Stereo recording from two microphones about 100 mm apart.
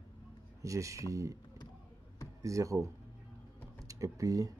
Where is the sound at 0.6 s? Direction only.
30° right (ahead or behind).